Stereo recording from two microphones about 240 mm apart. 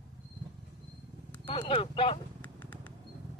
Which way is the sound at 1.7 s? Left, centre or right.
Left.